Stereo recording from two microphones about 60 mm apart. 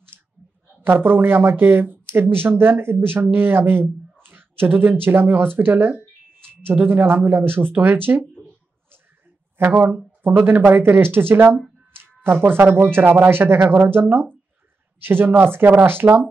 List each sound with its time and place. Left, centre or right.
0.8 s speech: right
9.6 s speech: right
11.9 s a sound: right
12.7 s speech: right